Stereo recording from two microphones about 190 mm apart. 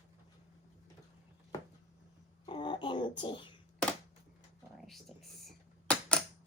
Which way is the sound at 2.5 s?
25° left (ahead or behind).